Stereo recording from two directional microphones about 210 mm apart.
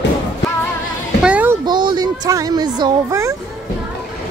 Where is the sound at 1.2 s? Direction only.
5° right (ahead or behind).